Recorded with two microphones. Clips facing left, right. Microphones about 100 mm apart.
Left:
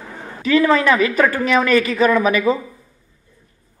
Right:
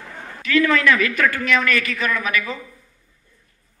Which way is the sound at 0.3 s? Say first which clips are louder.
Left 4 dB; 30° left (ahead or behind).